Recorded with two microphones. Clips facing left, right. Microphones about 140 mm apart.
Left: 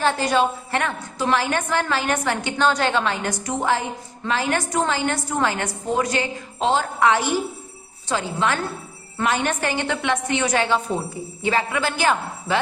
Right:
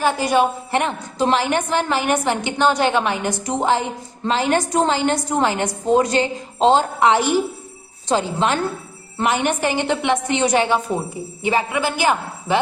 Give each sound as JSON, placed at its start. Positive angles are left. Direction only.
{"t": 0.0, "sound": "a woman's voice", "side_deg": -10}